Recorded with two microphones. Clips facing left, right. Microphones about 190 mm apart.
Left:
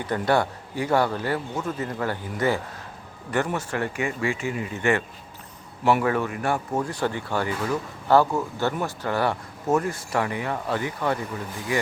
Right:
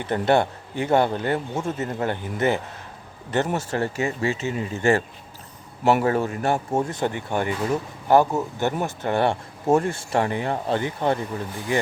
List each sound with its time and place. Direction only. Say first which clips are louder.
0.0 s a man's voice: right 2 dB; 25° right (ahead or behind)